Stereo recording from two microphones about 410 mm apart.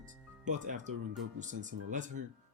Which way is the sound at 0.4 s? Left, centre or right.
Centre.